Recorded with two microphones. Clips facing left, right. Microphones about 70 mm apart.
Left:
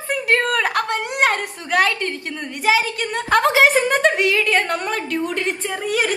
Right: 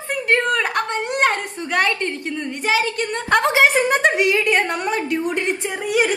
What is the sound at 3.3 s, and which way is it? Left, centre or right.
Speech, centre.